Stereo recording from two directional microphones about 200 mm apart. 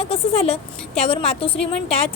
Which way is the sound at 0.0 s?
30° left (ahead or behind).